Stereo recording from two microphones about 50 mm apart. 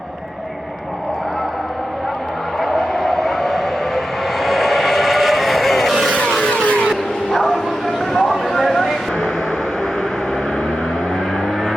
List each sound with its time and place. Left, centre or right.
2.6 s vehicle: centre
4.4 s a sound: centre
6.4 s music: left
6.8 s bow-wow: centre